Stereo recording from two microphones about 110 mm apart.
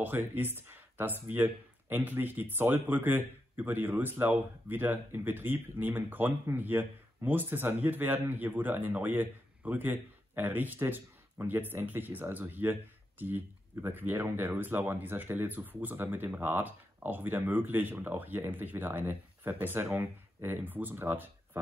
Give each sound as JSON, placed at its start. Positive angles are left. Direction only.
{"t": 0.0, "sound": "speech", "side_deg": -15}